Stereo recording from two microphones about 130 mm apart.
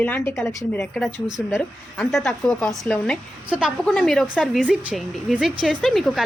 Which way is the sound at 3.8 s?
5° left (ahead or behind).